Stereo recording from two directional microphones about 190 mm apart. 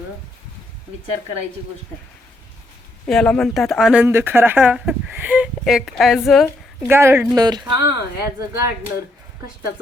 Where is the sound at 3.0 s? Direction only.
5° left (ahead or behind).